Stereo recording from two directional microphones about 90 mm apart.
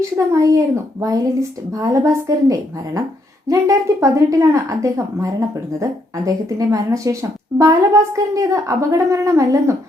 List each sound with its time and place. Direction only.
0.2 s speech: 35° right (ahead or behind)